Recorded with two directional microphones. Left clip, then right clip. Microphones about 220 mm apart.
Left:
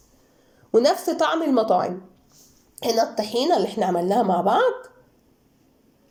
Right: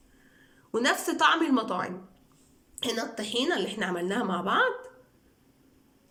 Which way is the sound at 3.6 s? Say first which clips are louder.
Left 8 dB; 15° right (ahead or behind).